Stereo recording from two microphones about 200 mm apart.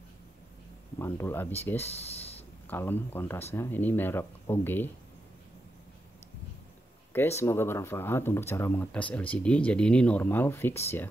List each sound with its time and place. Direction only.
0.9 s speech: 10° left (ahead or behind)
7.1 s speech: 10° left (ahead or behind)